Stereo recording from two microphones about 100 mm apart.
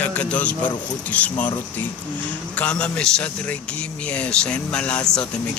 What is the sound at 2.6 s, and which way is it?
Speech, 10° left (ahead or behind).